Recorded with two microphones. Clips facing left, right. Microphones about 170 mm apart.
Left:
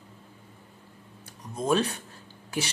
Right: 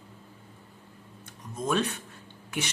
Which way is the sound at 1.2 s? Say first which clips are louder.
Left 2 dB; 35° left (ahead or behind).